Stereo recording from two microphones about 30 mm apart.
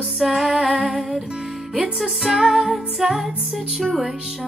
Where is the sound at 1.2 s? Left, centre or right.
Right.